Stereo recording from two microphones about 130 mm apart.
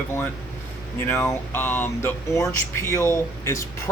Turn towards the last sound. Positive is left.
turn(degrees=20)  # may be behind; listen again after turning